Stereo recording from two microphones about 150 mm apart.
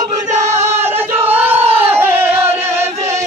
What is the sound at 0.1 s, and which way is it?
Chant, 50° right (ahead or behind).